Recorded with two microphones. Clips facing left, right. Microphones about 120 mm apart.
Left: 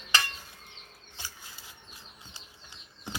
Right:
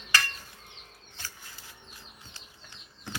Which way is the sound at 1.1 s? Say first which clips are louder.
Even; 15° left (ahead or behind).